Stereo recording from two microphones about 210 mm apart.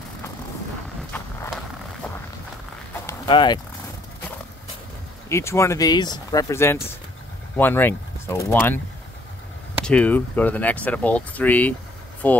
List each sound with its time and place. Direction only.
1.1 s walk: 5° left (ahead or behind)
3.1 s clip-clop: 20° left (ahead or behind)
5.3 s speech: 15° left (ahead or behind)
9.8 s speech: 5° left (ahead or behind)